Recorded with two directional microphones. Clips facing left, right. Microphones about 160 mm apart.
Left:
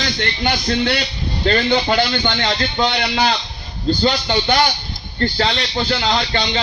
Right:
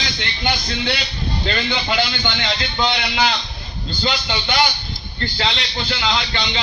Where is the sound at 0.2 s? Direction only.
50° left (ahead or behind).